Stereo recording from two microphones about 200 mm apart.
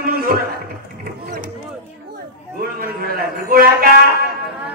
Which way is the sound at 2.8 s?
45° right (ahead or behind).